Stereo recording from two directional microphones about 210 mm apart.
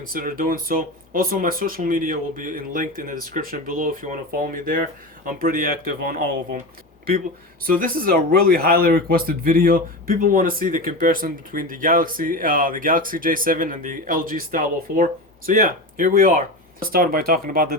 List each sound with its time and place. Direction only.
0.0 s speech: 40° right (ahead or behind)
7.7 s speech: 45° right (ahead or behind)